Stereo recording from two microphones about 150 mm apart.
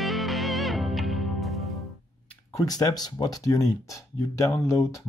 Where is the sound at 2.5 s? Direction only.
25° left (ahead or behind).